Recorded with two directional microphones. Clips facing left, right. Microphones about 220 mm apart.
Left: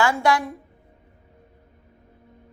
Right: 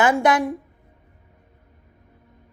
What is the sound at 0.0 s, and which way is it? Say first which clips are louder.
Speech: right 3 dB; 20° right (ahead or behind).